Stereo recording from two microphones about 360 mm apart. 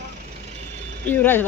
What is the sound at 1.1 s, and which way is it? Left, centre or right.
Speech, centre.